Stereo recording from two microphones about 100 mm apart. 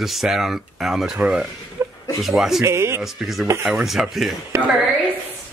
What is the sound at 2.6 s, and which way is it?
Speech, 30° right (ahead or behind).